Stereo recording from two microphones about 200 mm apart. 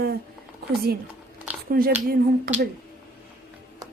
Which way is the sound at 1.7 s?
45° right (ahead or behind).